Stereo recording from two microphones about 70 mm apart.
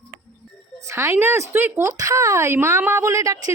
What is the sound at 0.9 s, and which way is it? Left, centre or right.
Speech, right.